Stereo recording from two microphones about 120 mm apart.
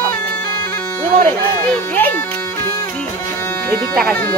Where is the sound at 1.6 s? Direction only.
15° left (ahead or behind).